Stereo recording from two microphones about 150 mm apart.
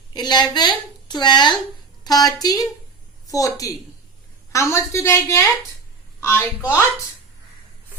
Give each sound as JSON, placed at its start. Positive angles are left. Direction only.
{"t": 0.1, "sound": "a woman's voice", "side_deg": 30}